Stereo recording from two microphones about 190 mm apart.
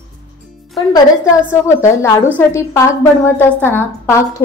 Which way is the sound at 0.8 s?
25° left (ahead or behind).